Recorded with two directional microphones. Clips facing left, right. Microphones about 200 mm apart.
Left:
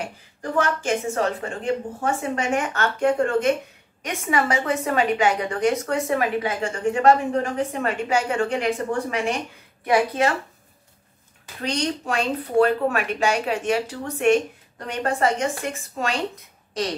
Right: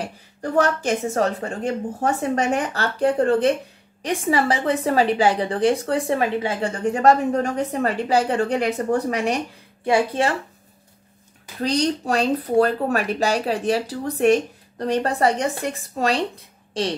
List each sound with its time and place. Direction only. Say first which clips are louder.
0.0 s a woman's voice: right 2 dB; 40° right (ahead or behind)
9.8 s speech: right 1 dB; 30° right (ahead or behind)
11.6 s a woman's voice: right 4 dB; 35° right (ahead or behind)